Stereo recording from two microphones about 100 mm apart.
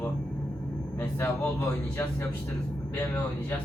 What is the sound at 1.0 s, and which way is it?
Speech, 20° left (ahead or behind).